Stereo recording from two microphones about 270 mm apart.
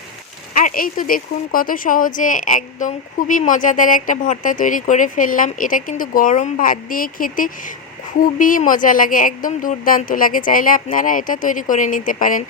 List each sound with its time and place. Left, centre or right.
0.5 s speech: left